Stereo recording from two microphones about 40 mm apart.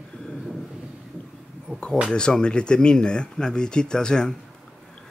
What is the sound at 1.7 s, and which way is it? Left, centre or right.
Speech, left.